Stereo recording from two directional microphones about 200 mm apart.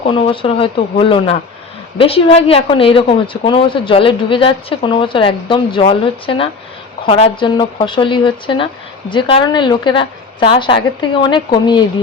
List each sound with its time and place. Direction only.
0.0 s a woman's voice: 25° left (ahead or behind)